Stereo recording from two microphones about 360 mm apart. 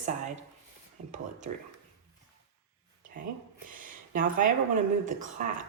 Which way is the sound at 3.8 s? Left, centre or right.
Right.